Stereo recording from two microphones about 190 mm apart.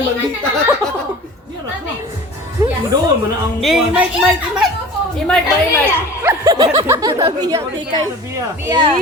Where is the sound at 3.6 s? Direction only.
Centre (ahead or behind).